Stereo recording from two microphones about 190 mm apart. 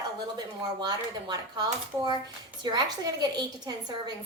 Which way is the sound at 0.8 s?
20° right (ahead or behind).